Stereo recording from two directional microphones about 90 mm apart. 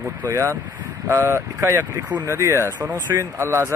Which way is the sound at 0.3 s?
35° right (ahead or behind).